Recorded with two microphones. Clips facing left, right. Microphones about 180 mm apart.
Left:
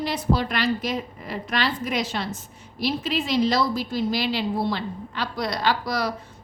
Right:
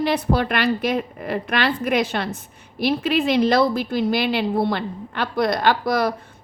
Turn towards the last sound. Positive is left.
turn(degrees=-55)  # may be behind; listen again after turning